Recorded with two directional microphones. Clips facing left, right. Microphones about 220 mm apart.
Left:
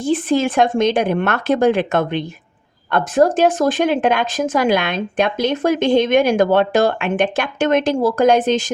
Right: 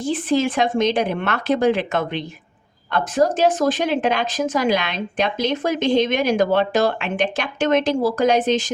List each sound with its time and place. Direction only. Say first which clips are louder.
0.1 s speech: left 3 dB; 50° left (ahead or behind)